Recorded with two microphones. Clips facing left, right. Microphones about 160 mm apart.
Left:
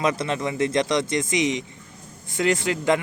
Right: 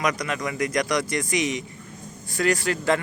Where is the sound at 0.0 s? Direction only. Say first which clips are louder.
Left 2 dB; 25° left (ahead or behind).